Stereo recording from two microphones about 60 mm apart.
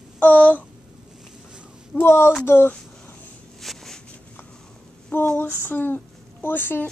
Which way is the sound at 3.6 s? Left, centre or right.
Centre.